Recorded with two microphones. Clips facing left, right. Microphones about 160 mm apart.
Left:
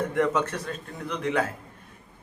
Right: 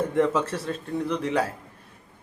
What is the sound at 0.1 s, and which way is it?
A man's voice, 30° right (ahead or behind).